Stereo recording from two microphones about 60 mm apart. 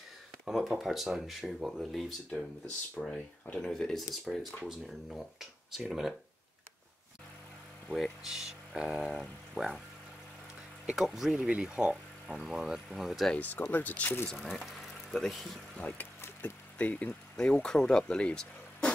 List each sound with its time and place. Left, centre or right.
0.5 s speech: centre
7.9 s speech: centre
9.0 s speech: centre
11.0 s speech: centre
11.4 s speech: centre
11.9 s speech: centre
13.4 s speech: left
14.7 s speech: centre
16.0 s a sound: left
17.4 s speech: centre